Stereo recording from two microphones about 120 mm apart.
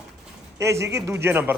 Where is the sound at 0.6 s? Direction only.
25° right (ahead or behind).